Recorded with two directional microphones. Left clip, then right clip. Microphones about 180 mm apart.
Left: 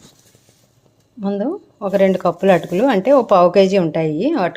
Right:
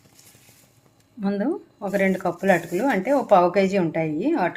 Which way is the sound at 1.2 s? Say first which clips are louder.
Left 4 dB; 25° left (ahead or behind).